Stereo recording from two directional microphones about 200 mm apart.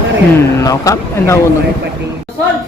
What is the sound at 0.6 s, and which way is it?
Speech, 15° left (ahead or behind).